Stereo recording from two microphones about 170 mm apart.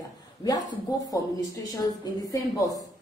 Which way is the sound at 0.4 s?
20° left (ahead or behind).